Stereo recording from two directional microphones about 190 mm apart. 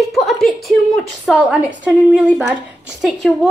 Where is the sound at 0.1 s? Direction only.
Centre (ahead or behind).